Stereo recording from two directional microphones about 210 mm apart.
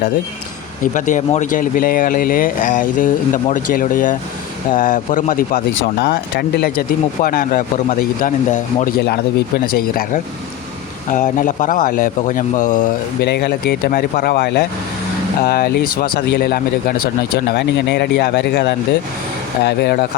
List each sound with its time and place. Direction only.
0.8 s a man's voice: 40° left (ahead or behind)
6.0 s a man's voice: 50° left (ahead or behind)